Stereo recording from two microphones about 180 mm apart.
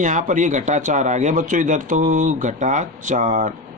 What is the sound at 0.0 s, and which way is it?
Speech, 45° right (ahead or behind).